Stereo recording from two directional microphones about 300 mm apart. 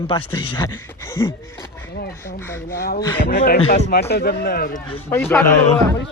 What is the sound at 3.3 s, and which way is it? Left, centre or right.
Speech, left.